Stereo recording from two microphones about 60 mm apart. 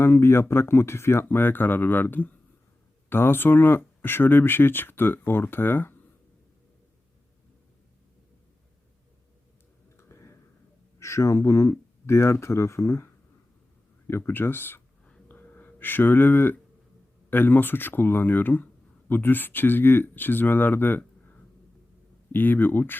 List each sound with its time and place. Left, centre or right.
0.0 s speech: left
10.0 s a sound: left
11.0 s speech: left
14.1 s speech: left
15.3 s a sound: left
17.2 s speech: left